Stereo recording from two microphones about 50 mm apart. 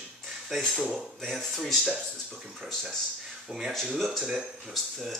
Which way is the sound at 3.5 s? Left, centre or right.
Centre.